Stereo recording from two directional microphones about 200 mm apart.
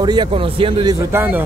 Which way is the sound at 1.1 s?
10° right (ahead or behind).